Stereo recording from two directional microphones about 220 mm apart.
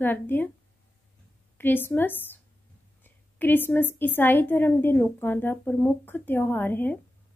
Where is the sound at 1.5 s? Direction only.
10° left (ahead or behind).